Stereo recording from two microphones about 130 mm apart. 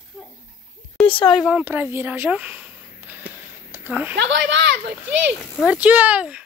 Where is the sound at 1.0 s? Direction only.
40° left (ahead or behind).